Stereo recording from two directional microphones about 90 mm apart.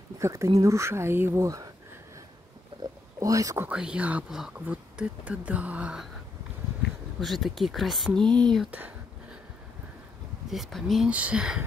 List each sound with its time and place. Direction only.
0.2 s speech: 35° right (ahead or behind)
2.8 s oink: 40° right (ahead or behind)
3.7 s speech: 10° right (ahead or behind)
7.2 s speech: centre (ahead or behind)
8.7 s whispering: 20° right (ahead or behind)
10.5 s speech: centre (ahead or behind)
11.1 s speech: 15° right (ahead or behind)